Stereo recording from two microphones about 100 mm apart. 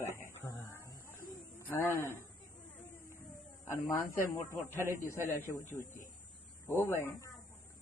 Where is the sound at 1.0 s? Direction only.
25° left (ahead or behind).